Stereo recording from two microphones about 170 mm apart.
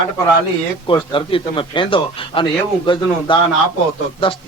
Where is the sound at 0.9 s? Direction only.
30° left (ahead or behind).